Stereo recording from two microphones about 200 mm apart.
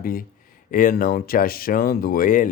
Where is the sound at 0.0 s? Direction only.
45° left (ahead or behind).